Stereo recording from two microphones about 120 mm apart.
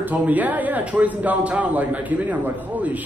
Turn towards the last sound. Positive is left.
turn(degrees=-15)  # may be behind; listen again after turning